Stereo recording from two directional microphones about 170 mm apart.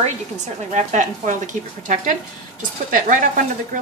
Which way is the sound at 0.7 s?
45° right (ahead or behind).